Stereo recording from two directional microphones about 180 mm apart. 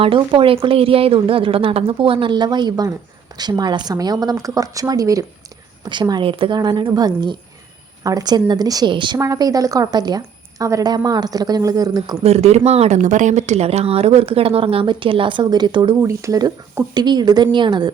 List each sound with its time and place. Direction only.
0.0 s a woman's voice: 30° right (ahead or behind)
12.2 s a woman's voice: 35° right (ahead or behind)